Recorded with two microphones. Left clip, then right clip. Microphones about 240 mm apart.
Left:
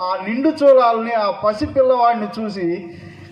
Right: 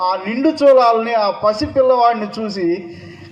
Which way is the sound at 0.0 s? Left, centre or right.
Right.